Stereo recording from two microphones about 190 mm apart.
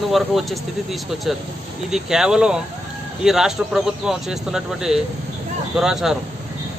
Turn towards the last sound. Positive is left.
turn(degrees=0)  # may be behind; listen again after turning